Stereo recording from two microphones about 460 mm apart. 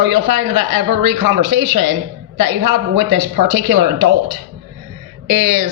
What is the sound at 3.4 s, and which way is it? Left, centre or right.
Speech, right.